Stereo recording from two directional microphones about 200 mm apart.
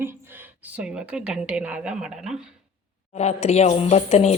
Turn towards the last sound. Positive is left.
turn(degrees=30)  # may be behind; listen again after turning